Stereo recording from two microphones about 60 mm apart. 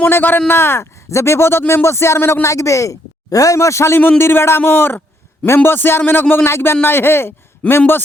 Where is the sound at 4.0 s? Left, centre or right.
Left.